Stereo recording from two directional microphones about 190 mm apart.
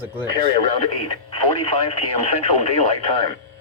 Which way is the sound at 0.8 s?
30° left (ahead or behind).